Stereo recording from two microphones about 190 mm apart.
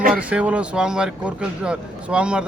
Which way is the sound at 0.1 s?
5° right (ahead or behind).